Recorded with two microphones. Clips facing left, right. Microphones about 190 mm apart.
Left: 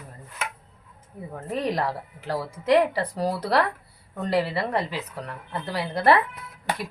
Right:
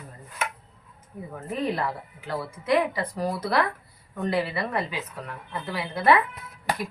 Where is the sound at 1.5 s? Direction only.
35° left (ahead or behind).